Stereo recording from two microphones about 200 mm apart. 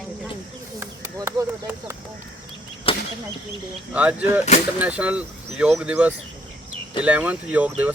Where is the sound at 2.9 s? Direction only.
25° left (ahead or behind).